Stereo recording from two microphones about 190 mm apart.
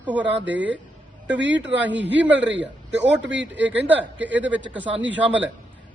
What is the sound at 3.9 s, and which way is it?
A woman's voice, 10° right (ahead or behind).